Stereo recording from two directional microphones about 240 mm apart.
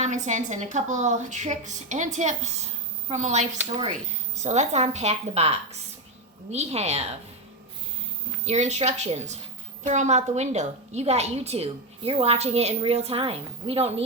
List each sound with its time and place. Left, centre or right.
0.0 s a woman's voice: right
8.4 s a woman's voice: right